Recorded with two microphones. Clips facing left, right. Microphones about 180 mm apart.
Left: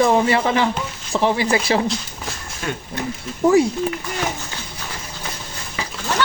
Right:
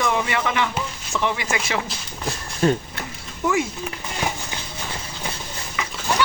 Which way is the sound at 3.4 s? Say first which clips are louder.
Left 8 dB; 35° left (ahead or behind).